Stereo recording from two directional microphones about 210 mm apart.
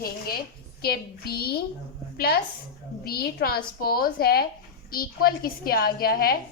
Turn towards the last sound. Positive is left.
turn(degrees=45)  # may be behind; listen again after turning